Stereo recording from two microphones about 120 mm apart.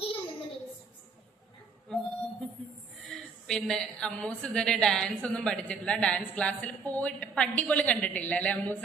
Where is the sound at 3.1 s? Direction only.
5° left (ahead or behind).